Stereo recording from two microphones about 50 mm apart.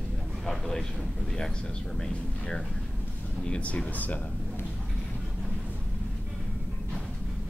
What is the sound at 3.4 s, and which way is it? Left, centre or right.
Speech, left.